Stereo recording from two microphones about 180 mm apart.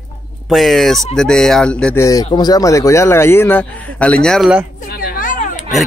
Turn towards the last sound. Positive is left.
turn(degrees=50)  # may be behind; listen again after turning